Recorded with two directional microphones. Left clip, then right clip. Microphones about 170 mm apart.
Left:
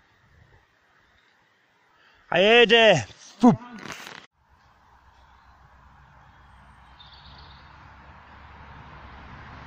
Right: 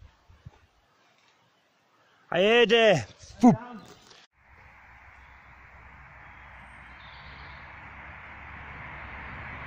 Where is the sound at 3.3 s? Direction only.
5° right (ahead or behind).